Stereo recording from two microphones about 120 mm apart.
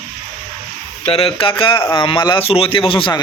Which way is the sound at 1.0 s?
55° left (ahead or behind).